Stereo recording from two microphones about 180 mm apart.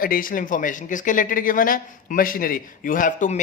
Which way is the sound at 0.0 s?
50° left (ahead or behind).